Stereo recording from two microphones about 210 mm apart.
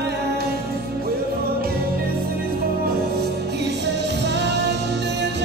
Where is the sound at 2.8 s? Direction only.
50° right (ahead or behind).